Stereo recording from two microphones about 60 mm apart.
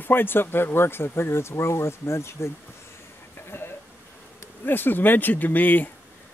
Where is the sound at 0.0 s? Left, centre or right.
Left.